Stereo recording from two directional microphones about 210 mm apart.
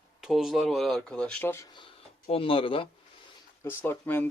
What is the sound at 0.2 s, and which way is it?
Speech, centre (ahead or behind).